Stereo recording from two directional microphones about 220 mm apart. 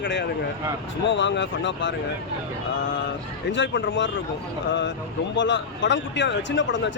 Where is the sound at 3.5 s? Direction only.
55° left (ahead or behind).